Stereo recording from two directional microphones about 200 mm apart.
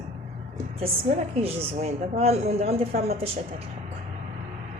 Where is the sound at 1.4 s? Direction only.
30° right (ahead or behind).